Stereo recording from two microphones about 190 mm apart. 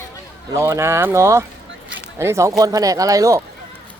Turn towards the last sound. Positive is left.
turn(degrees=-15)  # may be behind; listen again after turning